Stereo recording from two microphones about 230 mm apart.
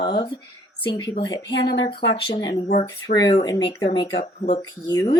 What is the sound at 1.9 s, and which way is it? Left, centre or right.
Speech, left.